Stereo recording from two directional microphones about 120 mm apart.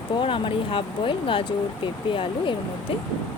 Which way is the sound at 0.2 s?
45° left (ahead or behind).